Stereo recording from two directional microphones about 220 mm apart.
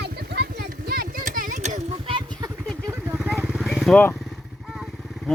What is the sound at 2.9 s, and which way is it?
Vehicle, 10° right (ahead or behind).